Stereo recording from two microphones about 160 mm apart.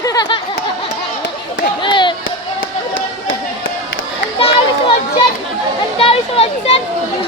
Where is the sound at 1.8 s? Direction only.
30° left (ahead or behind).